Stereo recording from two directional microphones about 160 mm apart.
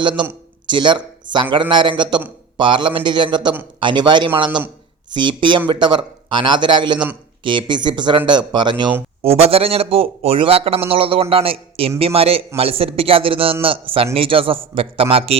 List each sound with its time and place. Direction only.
0.2 s a man's voice: 30° right (ahead or behind)